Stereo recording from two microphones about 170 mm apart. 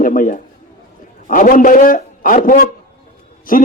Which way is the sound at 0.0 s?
50° left (ahead or behind).